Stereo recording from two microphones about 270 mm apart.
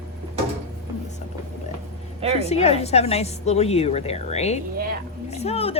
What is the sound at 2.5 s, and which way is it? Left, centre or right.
A woman's voice, left.